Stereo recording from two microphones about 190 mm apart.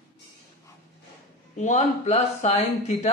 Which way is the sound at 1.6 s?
40° left (ahead or behind).